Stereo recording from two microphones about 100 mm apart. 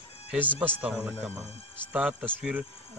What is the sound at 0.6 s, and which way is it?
Speech, 15° right (ahead or behind).